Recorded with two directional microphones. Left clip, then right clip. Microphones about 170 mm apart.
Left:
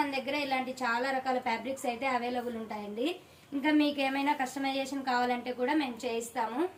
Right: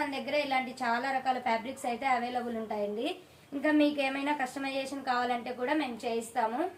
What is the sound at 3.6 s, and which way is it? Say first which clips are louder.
A woman's voice: right 1 dB; 35° right (ahead or behind).